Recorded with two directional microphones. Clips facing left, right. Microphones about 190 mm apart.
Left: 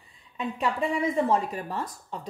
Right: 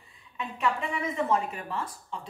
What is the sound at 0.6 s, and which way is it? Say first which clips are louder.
A woman's voice: left 3 dB; 35° left (ahead or behind).